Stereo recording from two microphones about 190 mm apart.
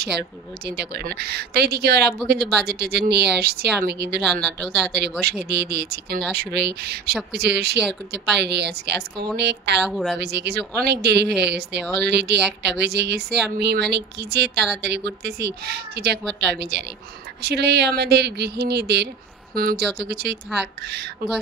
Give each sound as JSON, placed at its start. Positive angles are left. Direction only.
{"t": 0.7, "sound": "speech", "side_deg": -60}
{"t": 4.2, "sound": "speech", "side_deg": 0}
{"t": 5.5, "sound": "speech", "side_deg": -60}
{"t": 9.8, "sound": "speech", "side_deg": 0}
{"t": 10.2, "sound": "speech", "side_deg": -60}